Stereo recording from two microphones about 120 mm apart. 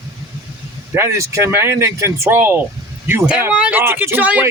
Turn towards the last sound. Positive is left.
turn(degrees=-15)  # may be behind; listen again after turning